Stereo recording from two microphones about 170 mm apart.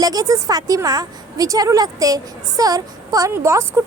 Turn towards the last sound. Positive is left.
turn(degrees=-15)  # may be behind; listen again after turning